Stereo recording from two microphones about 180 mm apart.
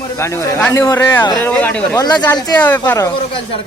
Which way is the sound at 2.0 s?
25° left (ahead or behind).